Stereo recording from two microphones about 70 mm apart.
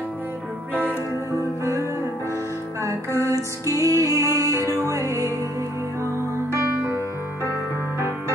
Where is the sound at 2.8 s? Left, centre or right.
Right.